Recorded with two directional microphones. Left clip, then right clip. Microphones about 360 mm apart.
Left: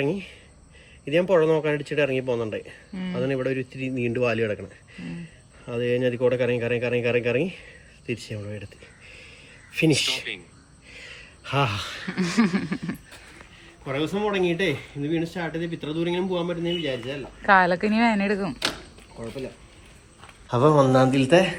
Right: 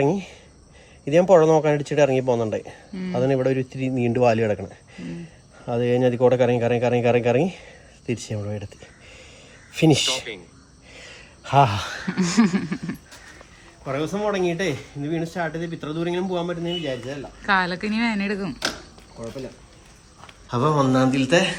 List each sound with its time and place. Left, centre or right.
0.0 s speech: right
5.6 s speech: right
8.8 s a sound: right
9.7 s speech: right
10.9 s a sound: right
12.0 s a man's voice: centre
20.5 s a man's voice: centre